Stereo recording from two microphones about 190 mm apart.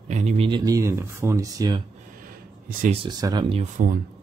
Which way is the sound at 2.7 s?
45° right (ahead or behind).